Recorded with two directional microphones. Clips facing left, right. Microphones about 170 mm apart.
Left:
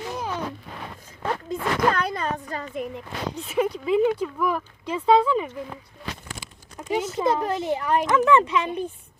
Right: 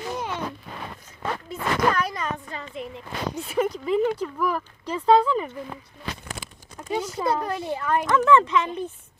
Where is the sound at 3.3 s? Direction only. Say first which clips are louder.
Left 1 dB; centre (ahead or behind).